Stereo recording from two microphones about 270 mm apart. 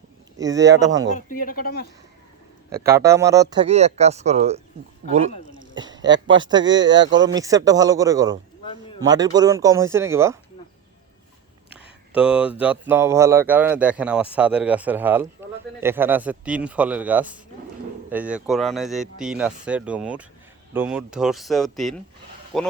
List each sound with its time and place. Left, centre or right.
1.1 s speech: left
2.7 s speech: centre
5.7 s a sound: centre
6.2 s speech: centre
12.1 s speech: centre